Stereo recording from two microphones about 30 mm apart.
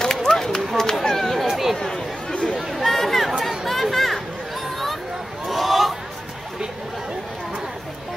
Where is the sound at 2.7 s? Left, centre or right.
Centre.